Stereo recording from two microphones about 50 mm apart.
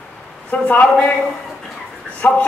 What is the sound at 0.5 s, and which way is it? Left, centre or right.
Speech, left.